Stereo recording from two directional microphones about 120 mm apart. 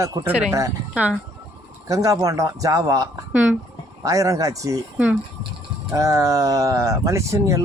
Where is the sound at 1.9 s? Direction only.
30° right (ahead or behind).